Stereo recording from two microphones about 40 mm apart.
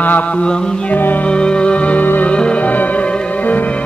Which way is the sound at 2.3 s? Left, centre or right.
Left.